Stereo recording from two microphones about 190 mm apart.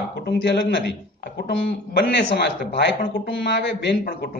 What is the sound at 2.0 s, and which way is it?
A man's voice, 65° left (ahead or behind).